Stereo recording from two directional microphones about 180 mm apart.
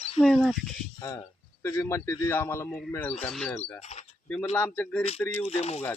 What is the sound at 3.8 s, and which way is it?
Speech, 35° left (ahead or behind).